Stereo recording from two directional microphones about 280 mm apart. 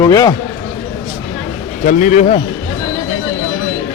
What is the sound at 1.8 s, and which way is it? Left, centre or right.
Speech, left.